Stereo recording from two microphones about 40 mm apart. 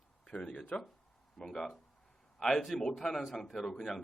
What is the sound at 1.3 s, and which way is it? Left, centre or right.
Speech, centre.